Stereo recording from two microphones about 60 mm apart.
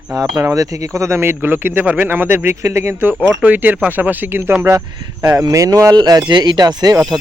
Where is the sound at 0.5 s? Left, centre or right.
Right.